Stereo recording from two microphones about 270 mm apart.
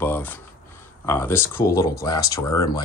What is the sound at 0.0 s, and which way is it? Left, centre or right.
Speech, centre.